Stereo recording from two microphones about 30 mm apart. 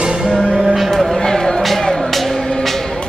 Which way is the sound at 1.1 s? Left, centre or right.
Centre.